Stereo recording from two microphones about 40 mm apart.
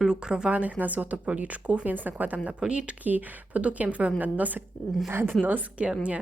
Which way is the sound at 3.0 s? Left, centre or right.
Right.